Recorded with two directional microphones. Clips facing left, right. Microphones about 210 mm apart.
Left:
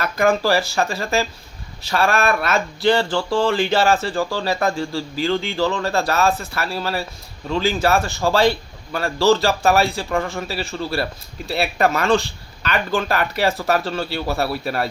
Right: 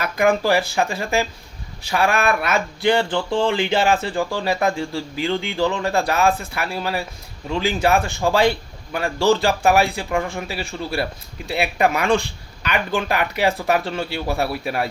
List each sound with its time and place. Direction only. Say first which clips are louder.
0.0 s speech: even; 15° right (ahead or behind)